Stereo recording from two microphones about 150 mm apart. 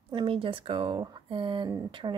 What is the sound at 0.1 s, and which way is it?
Speech, 35° right (ahead or behind).